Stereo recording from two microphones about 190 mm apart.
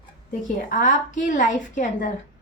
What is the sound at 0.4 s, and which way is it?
A woman's voice, 40° left (ahead or behind).